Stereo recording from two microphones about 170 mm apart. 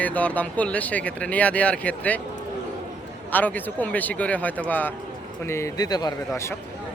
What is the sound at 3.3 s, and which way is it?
A man's voice, 10° left (ahead or behind).